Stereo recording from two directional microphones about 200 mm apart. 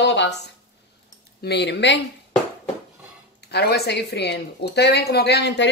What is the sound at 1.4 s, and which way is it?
Speech, 55° left (ahead or behind).